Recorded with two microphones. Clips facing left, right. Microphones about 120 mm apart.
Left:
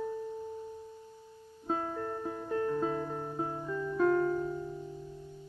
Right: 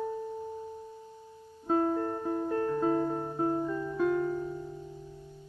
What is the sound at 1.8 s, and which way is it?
Music, 30° right (ahead or behind).